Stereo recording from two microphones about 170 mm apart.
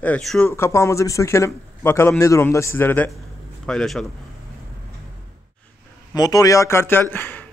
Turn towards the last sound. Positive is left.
turn(degrees=10)  # may be behind; listen again after turning